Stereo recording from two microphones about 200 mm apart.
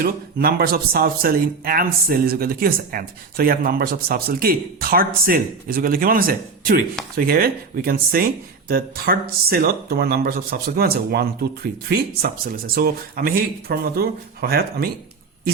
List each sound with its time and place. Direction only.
0.0 s speech: 50° right (ahead or behind)